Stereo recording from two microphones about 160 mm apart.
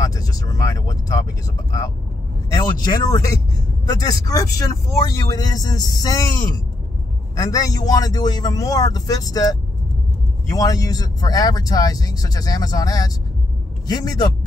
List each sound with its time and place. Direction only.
0.0 s speech: 20° left (ahead or behind)
2.5 s speech: 25° left (ahead or behind)
10.5 s speech: 20° left (ahead or behind)